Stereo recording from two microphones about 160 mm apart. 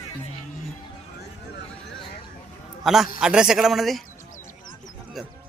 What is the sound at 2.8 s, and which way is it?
A man's voice, centre (ahead or behind).